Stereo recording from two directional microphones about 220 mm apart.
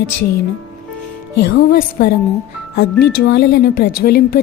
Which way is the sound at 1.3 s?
45° left (ahead or behind).